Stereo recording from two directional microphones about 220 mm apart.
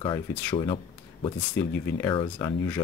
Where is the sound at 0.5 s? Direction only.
25° left (ahead or behind).